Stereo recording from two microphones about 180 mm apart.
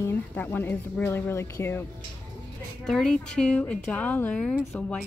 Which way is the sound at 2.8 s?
5° left (ahead or behind).